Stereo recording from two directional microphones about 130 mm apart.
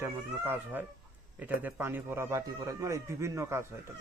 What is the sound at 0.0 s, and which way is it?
A man's voice, 15° right (ahead or behind).